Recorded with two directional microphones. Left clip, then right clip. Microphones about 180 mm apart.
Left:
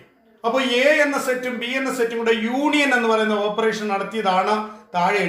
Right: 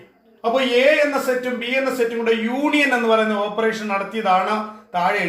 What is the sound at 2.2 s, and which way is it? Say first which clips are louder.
A man's voice: even; 25° left (ahead or behind).